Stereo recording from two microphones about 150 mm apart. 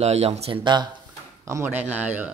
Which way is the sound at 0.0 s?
45° right (ahead or behind).